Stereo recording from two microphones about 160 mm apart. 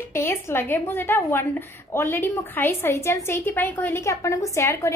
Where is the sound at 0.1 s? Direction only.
15° left (ahead or behind).